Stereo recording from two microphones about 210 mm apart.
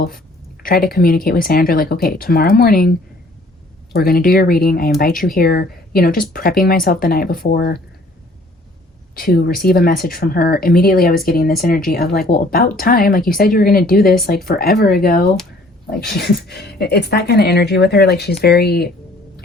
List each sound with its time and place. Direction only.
0.6 s speech: 45° left (ahead or behind)
3.9 s speech: 45° left (ahead or behind)
9.1 s speech: 45° left (ahead or behind)